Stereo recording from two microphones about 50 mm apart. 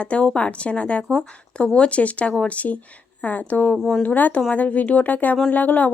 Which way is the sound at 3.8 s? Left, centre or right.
Centre.